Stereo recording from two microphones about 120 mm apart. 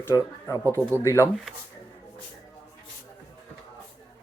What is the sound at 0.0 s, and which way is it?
Speech, 25° left (ahead or behind).